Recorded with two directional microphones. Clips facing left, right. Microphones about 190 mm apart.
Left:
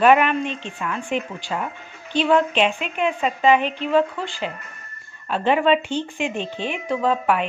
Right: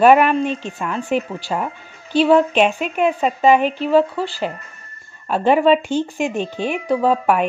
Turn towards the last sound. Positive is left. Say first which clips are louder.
# right 4 dB
turn(degrees=-40)  # may be behind; listen again after turning